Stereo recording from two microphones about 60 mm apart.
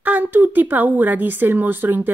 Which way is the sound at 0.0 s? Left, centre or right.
Right.